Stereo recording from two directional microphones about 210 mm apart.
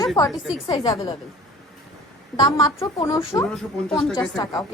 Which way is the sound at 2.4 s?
20° left (ahead or behind).